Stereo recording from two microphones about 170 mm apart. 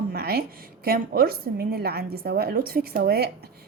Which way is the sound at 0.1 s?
65° right (ahead or behind).